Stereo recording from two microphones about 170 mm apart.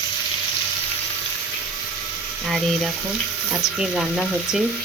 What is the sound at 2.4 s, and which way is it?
Frying, centre (ahead or behind).